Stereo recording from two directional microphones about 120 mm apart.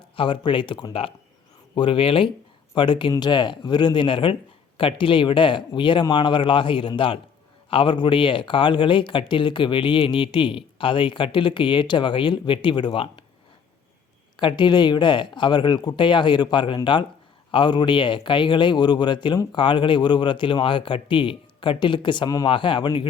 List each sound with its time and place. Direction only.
0.2 s speech: 45° left (ahead or behind)
14.3 s speech: 40° left (ahead or behind)